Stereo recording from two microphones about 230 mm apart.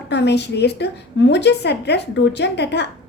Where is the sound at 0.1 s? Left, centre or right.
Left.